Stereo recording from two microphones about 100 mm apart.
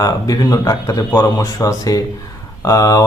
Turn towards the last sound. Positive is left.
turn(degrees=35)  # may be behind; listen again after turning